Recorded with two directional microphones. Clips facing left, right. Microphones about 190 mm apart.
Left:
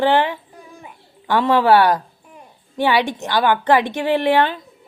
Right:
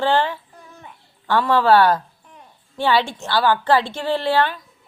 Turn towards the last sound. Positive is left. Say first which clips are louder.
# left 3 dB
turn(degrees=20)  # may be behind; listen again after turning